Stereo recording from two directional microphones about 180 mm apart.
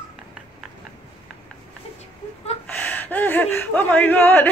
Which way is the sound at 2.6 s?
10° left (ahead or behind).